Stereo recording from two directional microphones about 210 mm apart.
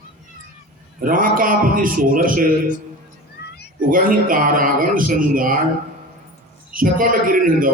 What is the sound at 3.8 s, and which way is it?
A man's voice, 40° right (ahead or behind).